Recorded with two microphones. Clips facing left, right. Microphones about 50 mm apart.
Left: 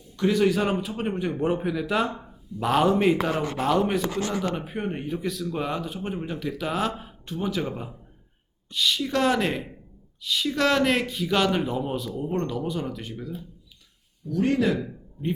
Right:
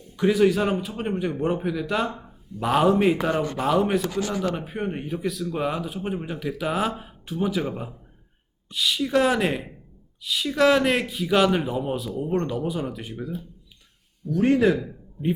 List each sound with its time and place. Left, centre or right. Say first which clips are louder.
0.2 s a man's voice: right 2 dB; centre
14.3 s speech: right 4 dB; right